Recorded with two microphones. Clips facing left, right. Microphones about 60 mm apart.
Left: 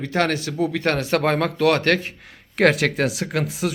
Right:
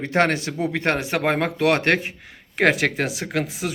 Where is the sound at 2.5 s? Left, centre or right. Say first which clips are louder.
Left 1 dB; centre.